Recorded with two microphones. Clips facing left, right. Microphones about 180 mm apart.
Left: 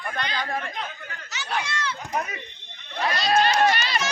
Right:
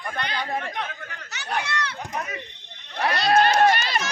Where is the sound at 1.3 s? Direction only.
60° right (ahead or behind).